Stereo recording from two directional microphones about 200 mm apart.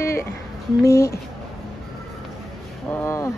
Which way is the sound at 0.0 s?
15° left (ahead or behind).